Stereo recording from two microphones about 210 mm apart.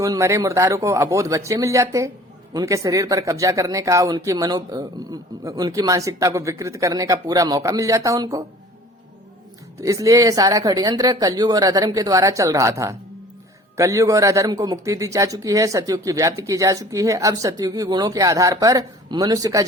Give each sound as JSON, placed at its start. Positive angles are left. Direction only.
{"t": 0.0, "sound": "speech", "side_deg": -15}
{"t": 9.8, "sound": "speech", "side_deg": -15}